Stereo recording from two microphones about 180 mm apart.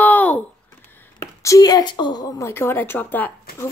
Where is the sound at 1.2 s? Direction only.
15° left (ahead or behind).